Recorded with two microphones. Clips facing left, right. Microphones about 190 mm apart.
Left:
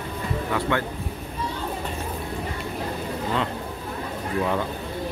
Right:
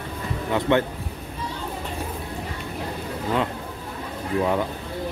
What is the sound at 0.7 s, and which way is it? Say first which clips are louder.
Speech: right 7 dB; 20° right (ahead or behind).